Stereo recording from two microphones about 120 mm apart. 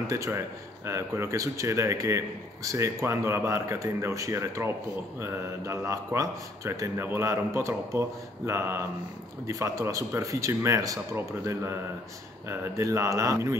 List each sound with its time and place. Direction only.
0.0 s a man's voice: 25° right (ahead or behind)